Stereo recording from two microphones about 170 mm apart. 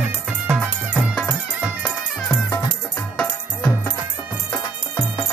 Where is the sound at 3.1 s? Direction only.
5° left (ahead or behind).